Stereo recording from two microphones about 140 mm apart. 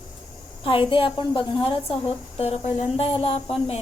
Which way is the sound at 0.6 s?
40° left (ahead or behind).